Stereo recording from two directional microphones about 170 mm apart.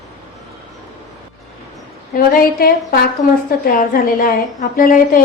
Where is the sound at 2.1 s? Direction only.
60° left (ahead or behind).